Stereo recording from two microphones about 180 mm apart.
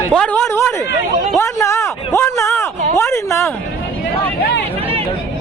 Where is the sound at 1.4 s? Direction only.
15° left (ahead or behind).